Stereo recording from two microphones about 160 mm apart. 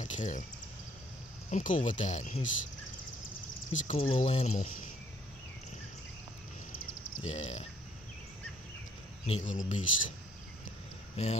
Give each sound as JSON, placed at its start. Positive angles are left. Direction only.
{"t": 0.0, "sound": "speech", "side_deg": 50}
{"t": 1.5, "sound": "speech", "side_deg": 55}
{"t": 3.8, "sound": "speech", "side_deg": 40}
{"t": 7.2, "sound": "speech", "side_deg": 40}
{"t": 9.2, "sound": "speech", "side_deg": 50}
{"t": 11.2, "sound": "speech", "side_deg": 40}